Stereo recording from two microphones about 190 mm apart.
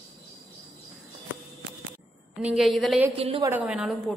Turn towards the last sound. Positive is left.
turn(degrees=-5)  # may be behind; listen again after turning